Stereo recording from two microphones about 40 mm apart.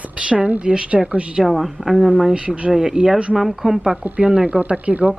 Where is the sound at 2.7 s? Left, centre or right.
Centre.